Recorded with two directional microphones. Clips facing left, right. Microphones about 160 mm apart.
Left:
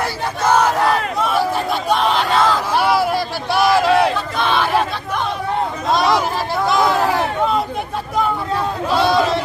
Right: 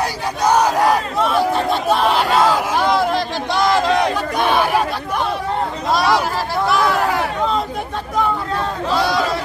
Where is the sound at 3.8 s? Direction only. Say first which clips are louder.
Left 2 dB; 10° left (ahead or behind).